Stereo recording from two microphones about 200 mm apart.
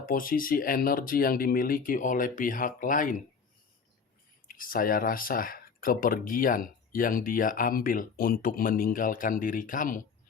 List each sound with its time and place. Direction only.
0.0 s speech: 45° left (ahead or behind)
4.4 s speech: 45° left (ahead or behind)